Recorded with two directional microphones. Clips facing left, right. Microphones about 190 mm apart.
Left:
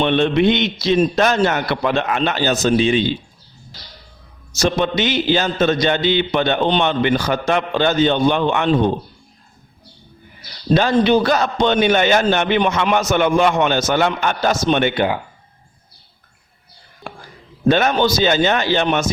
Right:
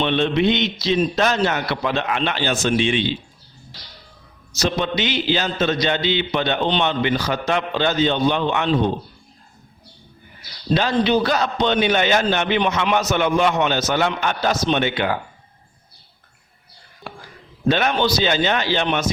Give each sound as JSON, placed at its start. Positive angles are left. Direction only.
{"t": 0.0, "sound": "a man's voice", "side_deg": 50}
{"t": 4.5, "sound": "a man's voice", "side_deg": 50}
{"t": 10.7, "sound": "a man's voice", "side_deg": 45}
{"t": 17.1, "sound": "a sound", "side_deg": 50}
{"t": 17.7, "sound": "a man's voice", "side_deg": 45}